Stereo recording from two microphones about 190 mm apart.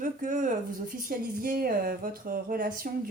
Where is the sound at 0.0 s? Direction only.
45° right (ahead or behind).